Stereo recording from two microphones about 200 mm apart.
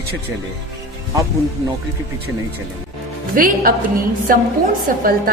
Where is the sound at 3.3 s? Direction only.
45° right (ahead or behind).